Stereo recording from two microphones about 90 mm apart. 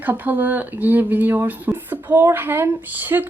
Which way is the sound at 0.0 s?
20° right (ahead or behind).